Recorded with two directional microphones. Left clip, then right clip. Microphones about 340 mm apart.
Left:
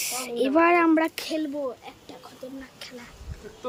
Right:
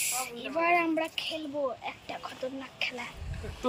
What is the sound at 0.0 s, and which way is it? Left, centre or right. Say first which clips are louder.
Speech: left 7 dB; centre.